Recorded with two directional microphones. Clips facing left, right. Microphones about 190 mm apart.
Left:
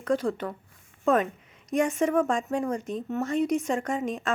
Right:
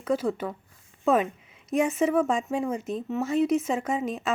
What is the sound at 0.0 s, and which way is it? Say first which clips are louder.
A woman's voice: even; 5° right (ahead or behind).